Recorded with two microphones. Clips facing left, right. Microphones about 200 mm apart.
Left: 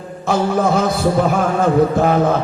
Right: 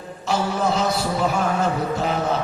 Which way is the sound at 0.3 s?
50° left (ahead or behind).